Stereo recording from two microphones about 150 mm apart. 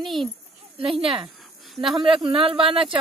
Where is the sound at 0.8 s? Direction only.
35° right (ahead or behind).